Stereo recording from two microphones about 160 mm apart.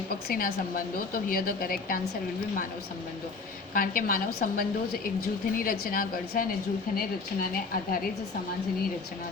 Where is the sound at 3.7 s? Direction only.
60° left (ahead or behind).